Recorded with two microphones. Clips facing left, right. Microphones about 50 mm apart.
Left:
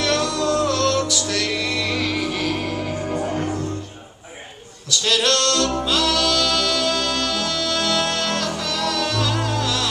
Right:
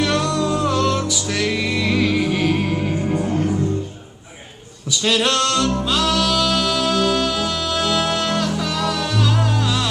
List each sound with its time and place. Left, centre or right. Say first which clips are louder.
0.0 s music: right 1 dB; centre
4.9 s a sound: right 1 dB; centre
5.7 s music: right 1 dB; centre